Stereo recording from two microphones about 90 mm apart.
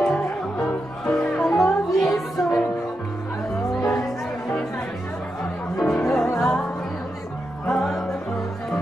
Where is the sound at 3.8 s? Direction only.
40° left (ahead or behind).